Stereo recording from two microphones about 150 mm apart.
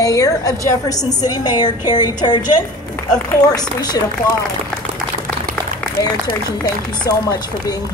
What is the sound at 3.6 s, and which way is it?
Speech, 25° left (ahead or behind).